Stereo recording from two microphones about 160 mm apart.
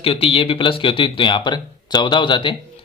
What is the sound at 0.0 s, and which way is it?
Speech, 35° left (ahead or behind).